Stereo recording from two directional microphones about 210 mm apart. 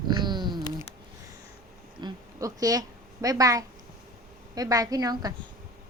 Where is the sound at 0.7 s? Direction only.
20° left (ahead or behind).